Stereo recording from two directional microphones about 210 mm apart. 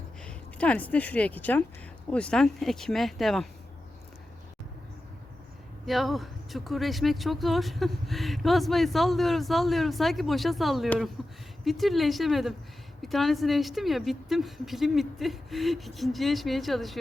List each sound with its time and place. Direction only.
0.2 s speech: 5° left (ahead or behind)
5.8 s speech: centre (ahead or behind)